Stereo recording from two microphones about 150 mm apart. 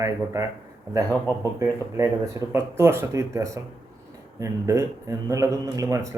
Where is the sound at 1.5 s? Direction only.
20° right (ahead or behind).